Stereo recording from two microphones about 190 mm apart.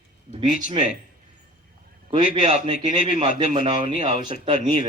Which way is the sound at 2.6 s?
30° right (ahead or behind).